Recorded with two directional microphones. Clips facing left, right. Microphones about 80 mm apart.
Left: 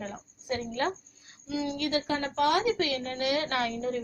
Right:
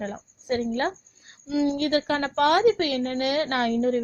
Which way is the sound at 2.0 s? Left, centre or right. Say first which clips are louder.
Right 5 dB; right.